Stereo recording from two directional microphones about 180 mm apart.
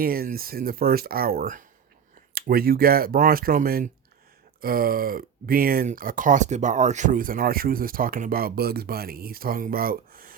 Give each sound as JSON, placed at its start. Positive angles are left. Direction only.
{"t": 0.0, "sound": "speech", "side_deg": -55}